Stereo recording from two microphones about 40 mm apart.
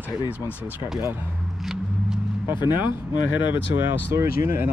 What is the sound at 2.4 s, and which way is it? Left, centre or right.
Speech, right.